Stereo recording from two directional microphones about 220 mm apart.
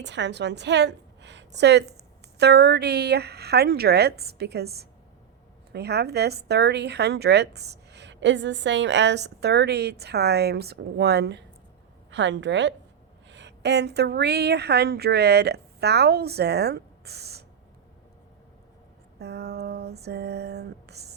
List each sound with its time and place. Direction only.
0.0 s a woman's voice: 55° right (ahead or behind)
19.2 s female singing: 50° right (ahead or behind)